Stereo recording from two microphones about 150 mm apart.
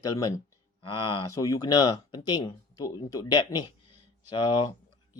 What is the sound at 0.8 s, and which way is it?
Speech, 35° left (ahead or behind).